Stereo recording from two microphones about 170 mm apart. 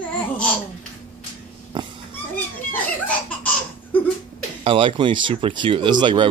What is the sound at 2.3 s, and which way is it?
Children playing, 10° left (ahead or behind).